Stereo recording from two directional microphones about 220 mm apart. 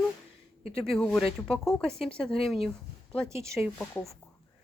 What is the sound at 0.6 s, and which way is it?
Speech, 25° left (ahead or behind).